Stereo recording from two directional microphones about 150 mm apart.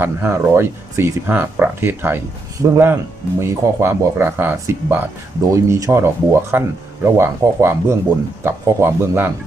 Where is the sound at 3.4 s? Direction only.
15° right (ahead or behind).